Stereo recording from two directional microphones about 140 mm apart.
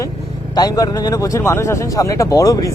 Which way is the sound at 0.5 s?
25° left (ahead or behind).